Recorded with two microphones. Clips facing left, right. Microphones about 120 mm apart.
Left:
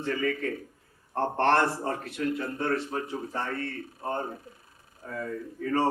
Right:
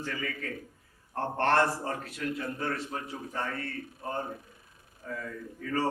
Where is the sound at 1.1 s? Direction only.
30° left (ahead or behind).